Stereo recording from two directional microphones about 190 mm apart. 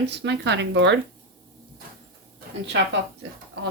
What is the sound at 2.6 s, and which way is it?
Speech, 70° right (ahead or behind).